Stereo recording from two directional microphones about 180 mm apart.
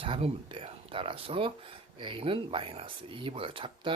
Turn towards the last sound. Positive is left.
turn(degrees=-30)  # may be behind; listen again after turning